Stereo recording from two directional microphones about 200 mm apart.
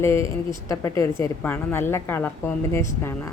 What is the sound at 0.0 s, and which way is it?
A woman's voice, 15° left (ahead or behind).